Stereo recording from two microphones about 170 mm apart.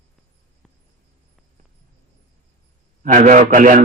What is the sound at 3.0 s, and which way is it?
Speech, 50° right (ahead or behind).